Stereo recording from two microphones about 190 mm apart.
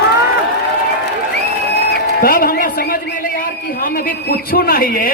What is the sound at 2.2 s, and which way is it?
A woman's voice, 50° left (ahead or behind).